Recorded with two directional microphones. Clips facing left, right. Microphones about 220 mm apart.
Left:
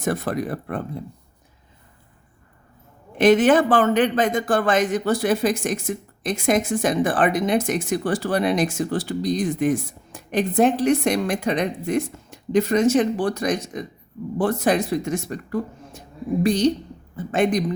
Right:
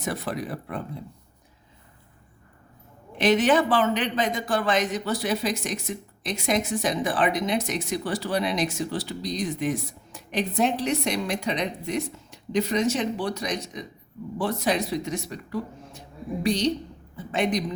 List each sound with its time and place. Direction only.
0.0 s a man's voice: 50° left (ahead or behind)
3.2 s a man's voice: 50° left (ahead or behind)